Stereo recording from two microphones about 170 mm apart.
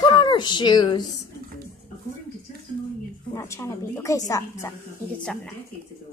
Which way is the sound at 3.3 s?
15° left (ahead or behind).